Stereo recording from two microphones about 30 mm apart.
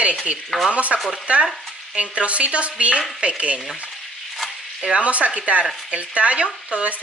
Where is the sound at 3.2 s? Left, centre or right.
Right.